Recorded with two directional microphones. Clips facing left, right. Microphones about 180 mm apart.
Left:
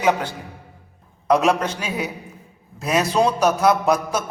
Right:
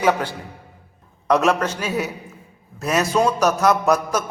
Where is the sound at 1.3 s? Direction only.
10° left (ahead or behind).